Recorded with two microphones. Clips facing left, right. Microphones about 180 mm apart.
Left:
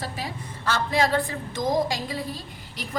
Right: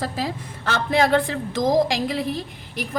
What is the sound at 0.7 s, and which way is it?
A woman's voice, 60° right (ahead or behind).